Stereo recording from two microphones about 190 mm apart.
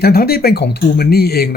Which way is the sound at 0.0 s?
55° left (ahead or behind).